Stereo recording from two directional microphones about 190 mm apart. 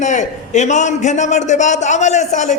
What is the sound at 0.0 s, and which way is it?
A man's voice, 40° left (ahead or behind).